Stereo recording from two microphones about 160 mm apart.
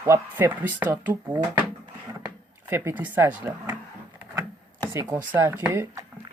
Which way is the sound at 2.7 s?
15° right (ahead or behind).